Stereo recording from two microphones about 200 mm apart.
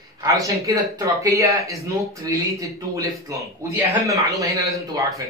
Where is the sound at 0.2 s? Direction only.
15° right (ahead or behind).